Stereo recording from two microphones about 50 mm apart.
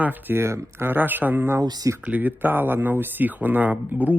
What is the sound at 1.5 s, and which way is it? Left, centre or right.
Speech, right.